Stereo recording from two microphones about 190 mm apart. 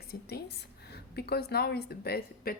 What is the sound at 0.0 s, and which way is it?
A woman's voice, 55° left (ahead or behind).